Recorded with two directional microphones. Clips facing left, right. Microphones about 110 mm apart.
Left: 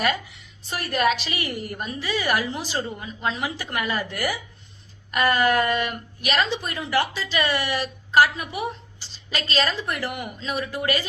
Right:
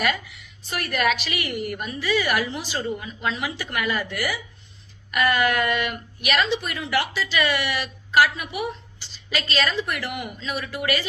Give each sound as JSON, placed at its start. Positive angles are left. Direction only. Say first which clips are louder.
{"t": 0.7, "sound": "a woman's voice", "louder": "left 1 dB", "side_deg": 35}